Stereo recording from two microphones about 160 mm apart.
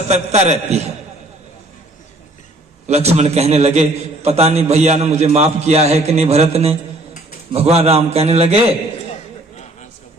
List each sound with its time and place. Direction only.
0.1 s a man's voice: 45° right (ahead or behind)
2.8 s a man's voice: 40° right (ahead or behind)